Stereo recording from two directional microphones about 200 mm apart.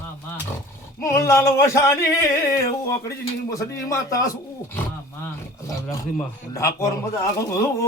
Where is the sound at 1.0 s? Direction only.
15° left (ahead or behind).